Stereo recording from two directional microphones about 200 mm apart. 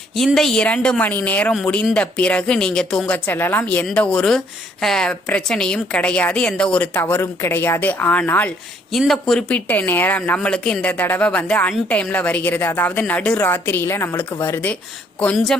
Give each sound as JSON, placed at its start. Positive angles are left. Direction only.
{"t": 0.2, "sound": "speech", "side_deg": 0}